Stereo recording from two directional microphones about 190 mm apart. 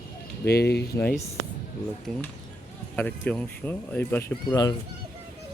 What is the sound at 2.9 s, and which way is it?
Speech, 5° left (ahead or behind).